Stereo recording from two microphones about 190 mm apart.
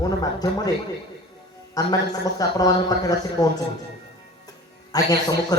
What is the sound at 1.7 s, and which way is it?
A man's voice, 20° left (ahead or behind).